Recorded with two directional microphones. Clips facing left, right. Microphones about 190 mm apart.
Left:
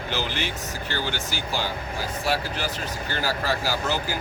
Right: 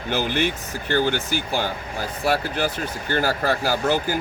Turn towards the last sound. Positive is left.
turn(degrees=-50)  # may be behind; listen again after turning